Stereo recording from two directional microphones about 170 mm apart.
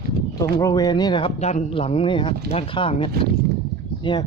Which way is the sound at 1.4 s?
40° left (ahead or behind).